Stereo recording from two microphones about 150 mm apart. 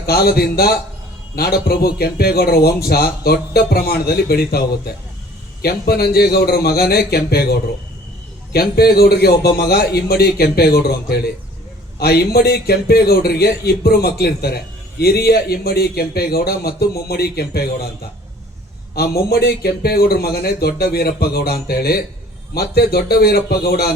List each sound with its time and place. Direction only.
0.0 s a man's voice: 90° left
5.6 s a man's voice: 90° left
8.5 s a man's voice: 90° left
18.9 s a man's voice: 90° left